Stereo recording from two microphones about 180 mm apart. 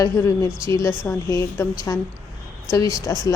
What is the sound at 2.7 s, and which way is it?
Speech, 20° left (ahead or behind).